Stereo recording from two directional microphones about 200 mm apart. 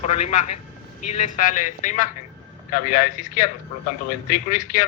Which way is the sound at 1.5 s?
40° left (ahead or behind).